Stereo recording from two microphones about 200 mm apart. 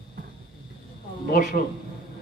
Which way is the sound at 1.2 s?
45° left (ahead or behind).